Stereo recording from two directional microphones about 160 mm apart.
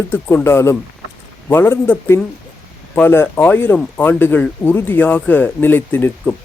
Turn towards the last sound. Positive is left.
turn(degrees=10)  # may be behind; listen again after turning